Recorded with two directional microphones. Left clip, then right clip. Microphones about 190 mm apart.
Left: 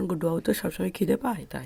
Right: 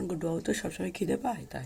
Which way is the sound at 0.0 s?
45° left (ahead or behind).